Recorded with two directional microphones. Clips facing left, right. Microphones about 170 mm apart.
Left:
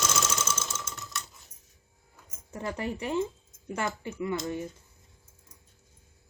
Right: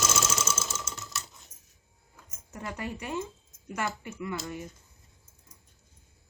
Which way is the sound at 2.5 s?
25° left (ahead or behind).